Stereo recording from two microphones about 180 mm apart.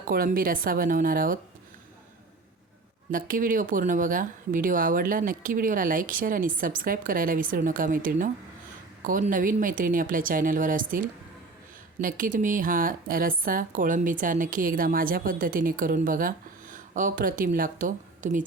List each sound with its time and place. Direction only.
0.1 s a woman's voice: 55° right (ahead or behind)
3.1 s a woman's voice: 50° right (ahead or behind)